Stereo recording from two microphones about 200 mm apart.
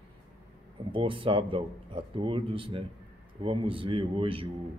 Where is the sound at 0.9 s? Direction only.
25° right (ahead or behind).